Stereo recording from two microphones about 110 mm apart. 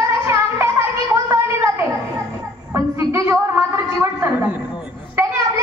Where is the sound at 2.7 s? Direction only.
25° right (ahead or behind).